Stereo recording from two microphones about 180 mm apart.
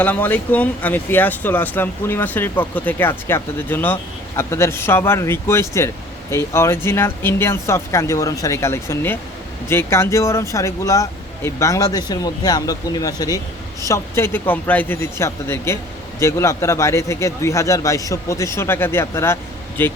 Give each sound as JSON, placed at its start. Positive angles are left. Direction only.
{"t": 0.0, "sound": "speech", "side_deg": 10}